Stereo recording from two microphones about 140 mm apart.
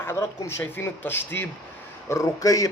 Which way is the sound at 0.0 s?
20° left (ahead or behind).